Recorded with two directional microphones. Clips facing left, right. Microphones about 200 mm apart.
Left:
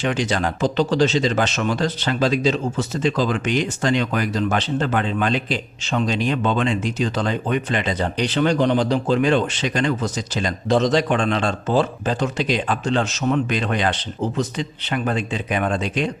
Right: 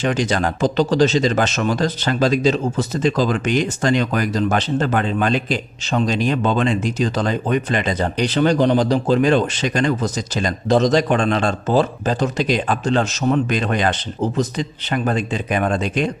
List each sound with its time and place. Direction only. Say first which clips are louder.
0.0 s speech: right 2 dB; 40° right (ahead or behind)